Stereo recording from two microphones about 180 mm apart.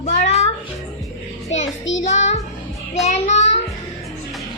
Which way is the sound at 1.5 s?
90° left.